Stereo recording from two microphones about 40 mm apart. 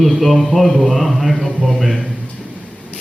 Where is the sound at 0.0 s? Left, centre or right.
Centre.